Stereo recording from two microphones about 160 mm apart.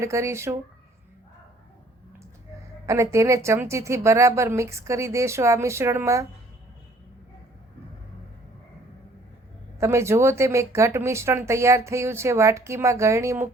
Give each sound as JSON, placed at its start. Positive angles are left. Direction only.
{"t": 0.0, "sound": "speech", "side_deg": -20}
{"t": 2.8, "sound": "a woman's voice", "side_deg": -20}
{"t": 9.8, "sound": "speech", "side_deg": -15}